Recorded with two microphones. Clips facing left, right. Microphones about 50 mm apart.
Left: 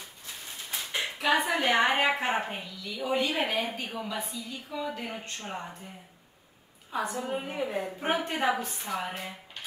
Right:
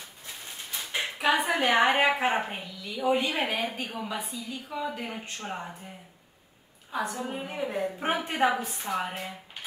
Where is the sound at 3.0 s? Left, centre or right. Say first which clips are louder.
Right 3 dB; centre.